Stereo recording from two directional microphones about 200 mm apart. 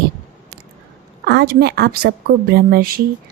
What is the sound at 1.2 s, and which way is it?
Speech, 50° right (ahead or behind).